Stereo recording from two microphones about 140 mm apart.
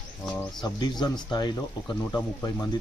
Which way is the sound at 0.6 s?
30° left (ahead or behind).